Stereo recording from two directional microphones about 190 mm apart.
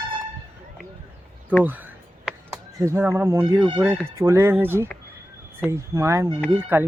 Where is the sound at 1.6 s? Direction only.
10° right (ahead or behind).